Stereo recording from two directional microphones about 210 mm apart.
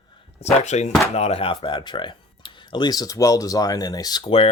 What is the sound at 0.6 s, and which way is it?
Speech, 35° left (ahead or behind).